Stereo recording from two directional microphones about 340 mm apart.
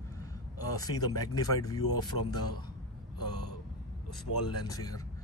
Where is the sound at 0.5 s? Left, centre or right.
Centre.